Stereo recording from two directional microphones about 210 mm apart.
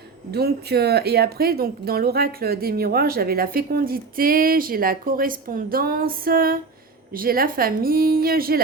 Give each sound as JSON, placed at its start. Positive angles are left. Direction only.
{"t": 0.3, "sound": "speech", "side_deg": -50}